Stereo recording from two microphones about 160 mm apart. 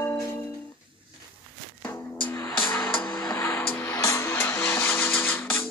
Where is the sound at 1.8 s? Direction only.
10° left (ahead or behind).